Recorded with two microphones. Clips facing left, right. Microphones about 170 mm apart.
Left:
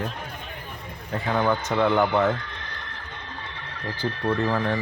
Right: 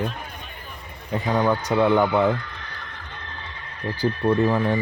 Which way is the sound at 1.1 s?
15° right (ahead or behind).